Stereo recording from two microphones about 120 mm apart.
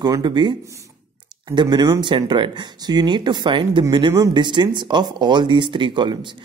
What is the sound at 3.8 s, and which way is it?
Speech, 30° right (ahead or behind).